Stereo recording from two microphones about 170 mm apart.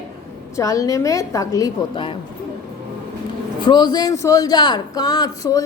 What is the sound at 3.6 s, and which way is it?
A woman's voice, 25° left (ahead or behind).